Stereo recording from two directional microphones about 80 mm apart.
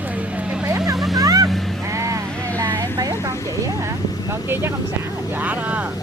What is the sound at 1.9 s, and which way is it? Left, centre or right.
Vehicle, right.